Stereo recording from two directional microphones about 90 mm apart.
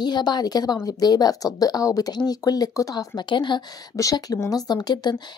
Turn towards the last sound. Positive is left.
turn(degrees=50)  # may be behind; listen again after turning